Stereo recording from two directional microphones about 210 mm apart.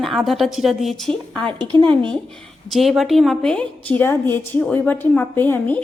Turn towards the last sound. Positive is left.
turn(degrees=10)  # may be behind; listen again after turning